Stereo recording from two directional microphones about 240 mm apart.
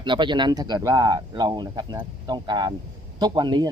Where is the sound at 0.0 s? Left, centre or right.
Centre.